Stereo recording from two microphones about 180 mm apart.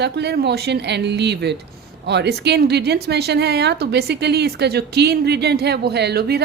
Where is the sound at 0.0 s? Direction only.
70° right (ahead or behind).